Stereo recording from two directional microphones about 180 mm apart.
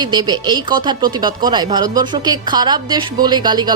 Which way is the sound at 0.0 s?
25° right (ahead or behind).